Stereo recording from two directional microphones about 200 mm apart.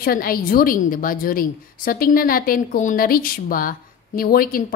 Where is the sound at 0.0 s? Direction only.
45° left (ahead or behind).